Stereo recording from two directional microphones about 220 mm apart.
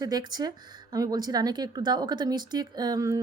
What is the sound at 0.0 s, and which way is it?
A woman's voice, 15° right (ahead or behind).